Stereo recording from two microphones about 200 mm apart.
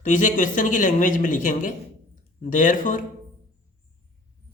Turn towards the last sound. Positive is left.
turn(degrees=40)  # may be behind; listen again after turning